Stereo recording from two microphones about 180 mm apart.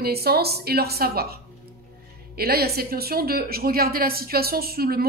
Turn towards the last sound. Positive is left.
turn(degrees=-60)  # may be behind; listen again after turning